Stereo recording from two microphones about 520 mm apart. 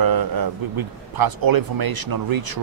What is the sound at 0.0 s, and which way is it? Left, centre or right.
Speech, right.